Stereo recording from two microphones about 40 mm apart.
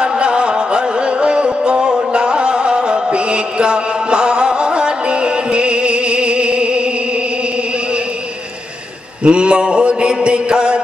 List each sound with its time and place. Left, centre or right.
0.0 s music: right
9.2 s mantra: right